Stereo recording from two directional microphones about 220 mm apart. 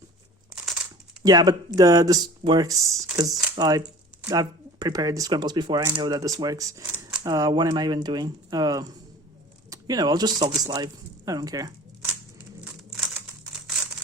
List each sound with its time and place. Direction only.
1.2 s speech: 15° right (ahead or behind)